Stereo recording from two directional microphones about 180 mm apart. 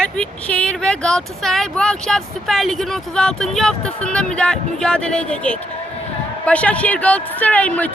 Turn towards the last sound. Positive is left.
turn(degrees=10)  # may be behind; listen again after turning